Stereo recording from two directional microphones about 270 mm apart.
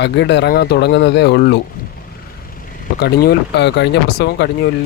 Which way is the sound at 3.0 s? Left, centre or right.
Left.